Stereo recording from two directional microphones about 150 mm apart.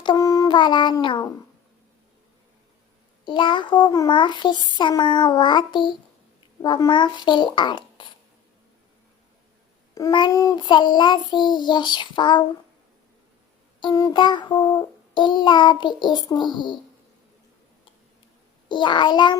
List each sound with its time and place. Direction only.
0.0 s a sound: 25° left (ahead or behind)
3.2 s child singing: 35° left (ahead or behind)
9.9 s child singing: 25° left (ahead or behind)
13.7 s child singing: 25° left (ahead or behind)
18.7 s child singing: 30° left (ahead or behind)